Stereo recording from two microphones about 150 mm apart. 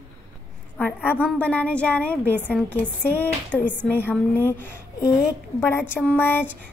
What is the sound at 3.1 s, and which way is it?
Speech, 15° left (ahead or behind).